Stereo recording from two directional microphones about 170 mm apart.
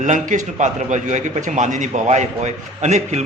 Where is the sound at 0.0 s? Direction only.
45° right (ahead or behind).